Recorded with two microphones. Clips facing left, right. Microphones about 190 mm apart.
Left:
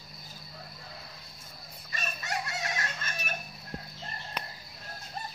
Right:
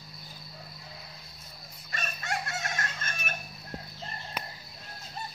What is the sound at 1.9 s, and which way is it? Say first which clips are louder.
Chicken: right 1 dB; 55° right (ahead or behind).